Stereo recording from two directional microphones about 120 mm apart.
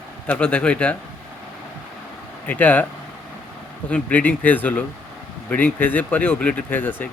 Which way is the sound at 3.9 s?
15° left (ahead or behind).